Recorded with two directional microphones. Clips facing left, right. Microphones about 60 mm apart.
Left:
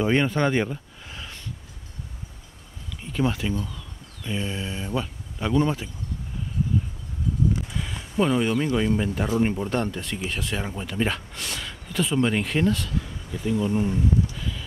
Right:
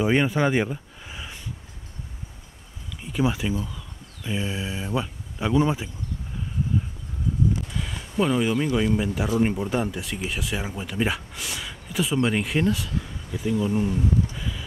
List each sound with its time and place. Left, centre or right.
0.0 s speech: centre
3.0 s speech: centre
7.8 s speech: centre
14.3 s a sound: centre